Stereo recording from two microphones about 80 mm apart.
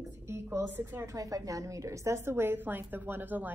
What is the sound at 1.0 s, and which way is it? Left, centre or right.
A woman's voice, right.